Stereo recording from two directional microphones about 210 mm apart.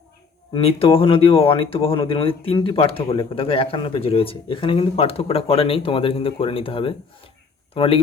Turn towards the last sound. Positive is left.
turn(degrees=25)  # may be behind; listen again after turning